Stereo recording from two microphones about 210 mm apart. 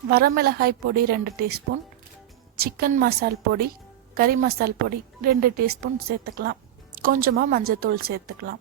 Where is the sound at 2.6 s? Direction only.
45° right (ahead or behind).